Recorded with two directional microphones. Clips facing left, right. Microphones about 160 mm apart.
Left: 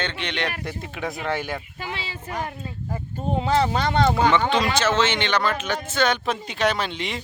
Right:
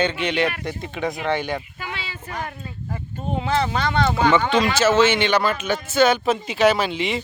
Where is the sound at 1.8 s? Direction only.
30° left (ahead or behind).